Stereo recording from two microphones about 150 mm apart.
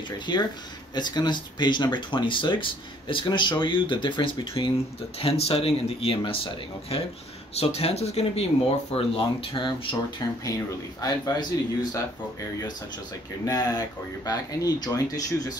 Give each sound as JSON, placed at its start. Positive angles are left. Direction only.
{"t": 0.3, "sound": "speech", "side_deg": 30}
{"t": 13.5, "sound": "speech", "side_deg": 25}